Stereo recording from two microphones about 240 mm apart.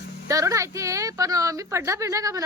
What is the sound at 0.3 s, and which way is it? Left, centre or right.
A woman's voice, centre.